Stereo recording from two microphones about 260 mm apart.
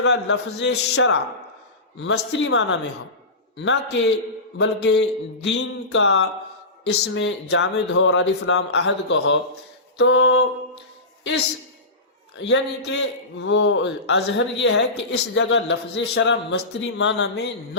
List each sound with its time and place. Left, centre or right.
0.0 s a man's voice: left